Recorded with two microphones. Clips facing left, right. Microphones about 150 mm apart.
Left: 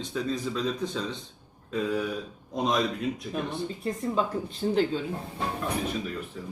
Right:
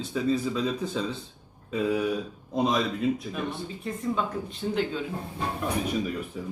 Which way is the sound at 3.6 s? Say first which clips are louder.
Left 1 dB; 35° left (ahead or behind).